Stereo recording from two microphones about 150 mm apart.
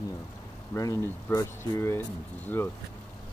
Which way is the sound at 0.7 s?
20° left (ahead or behind).